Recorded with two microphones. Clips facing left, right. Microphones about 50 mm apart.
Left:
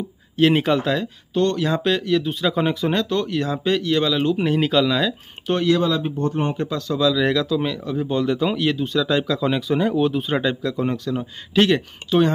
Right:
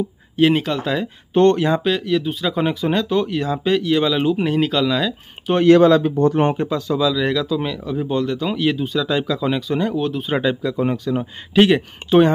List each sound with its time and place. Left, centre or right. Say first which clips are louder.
0.6 s speech: left 3 dB; centre
1.3 s speech: right 6 dB; right
1.8 s speech: right 1 dB; centre
5.8 s a man's voice: right 8 dB; right
6.5 s speech: right 3 dB; centre
12.0 s speech: right 5 dB; right